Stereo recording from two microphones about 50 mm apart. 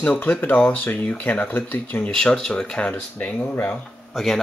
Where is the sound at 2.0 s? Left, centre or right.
Left.